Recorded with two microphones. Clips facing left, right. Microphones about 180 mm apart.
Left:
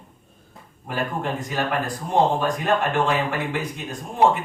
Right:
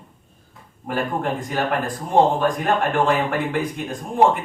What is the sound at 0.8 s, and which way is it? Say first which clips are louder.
Speech: right 3 dB; 55° right (ahead or behind).